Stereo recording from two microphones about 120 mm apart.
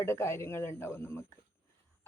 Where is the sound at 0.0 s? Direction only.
20° left (ahead or behind).